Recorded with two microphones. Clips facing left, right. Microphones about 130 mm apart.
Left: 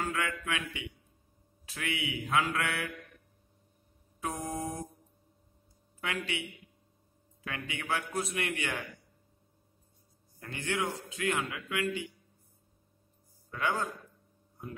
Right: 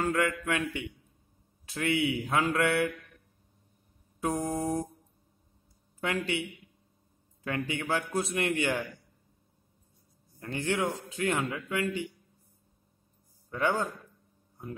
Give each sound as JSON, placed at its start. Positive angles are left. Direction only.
{"t": 0.0, "sound": "a man's voice", "side_deg": -40}
{"t": 4.2, "sound": "a man's voice", "side_deg": -30}
{"t": 5.9, "sound": "a man's voice", "side_deg": -35}
{"t": 7.4, "sound": "a man's voice", "side_deg": -35}
{"t": 10.4, "sound": "a man's voice", "side_deg": -30}
{"t": 13.5, "sound": "a man's voice", "side_deg": -30}